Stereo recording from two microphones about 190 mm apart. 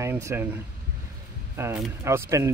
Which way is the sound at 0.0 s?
15° right (ahead or behind).